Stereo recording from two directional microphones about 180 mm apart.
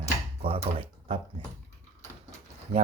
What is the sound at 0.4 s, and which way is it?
Speech, 30° right (ahead or behind).